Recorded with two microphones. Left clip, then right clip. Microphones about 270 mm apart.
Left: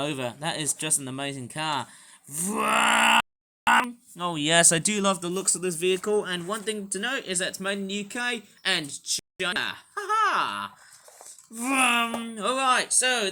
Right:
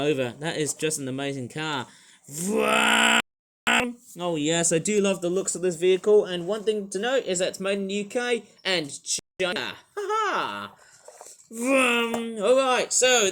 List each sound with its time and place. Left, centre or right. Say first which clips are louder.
0.0 s speech: right 4 dB; centre
4.2 s speech: left 3 dB; left